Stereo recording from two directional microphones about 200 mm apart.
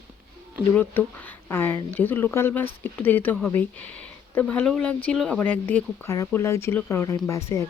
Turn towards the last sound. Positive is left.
turn(degrees=15)  # may be behind; listen again after turning